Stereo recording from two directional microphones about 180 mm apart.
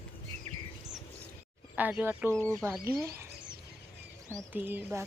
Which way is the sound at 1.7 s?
10° right (ahead or behind).